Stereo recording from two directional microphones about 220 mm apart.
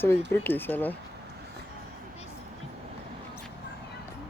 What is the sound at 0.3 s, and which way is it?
Speech, 10° left (ahead or behind).